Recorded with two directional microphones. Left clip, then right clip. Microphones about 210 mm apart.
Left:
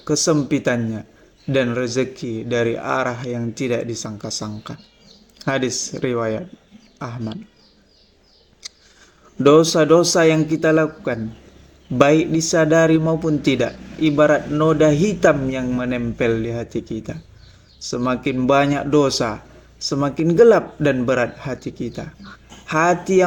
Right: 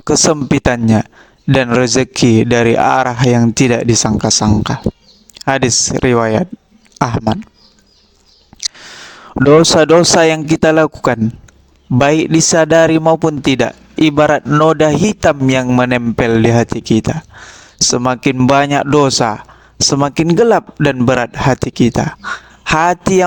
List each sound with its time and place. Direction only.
0.0 s speech: 50° right (ahead or behind)
8.6 s speech: 50° right (ahead or behind)